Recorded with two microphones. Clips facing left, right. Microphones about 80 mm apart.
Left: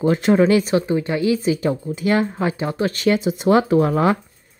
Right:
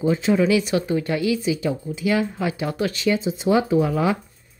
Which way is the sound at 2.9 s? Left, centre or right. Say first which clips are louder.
Left 3 dB; left.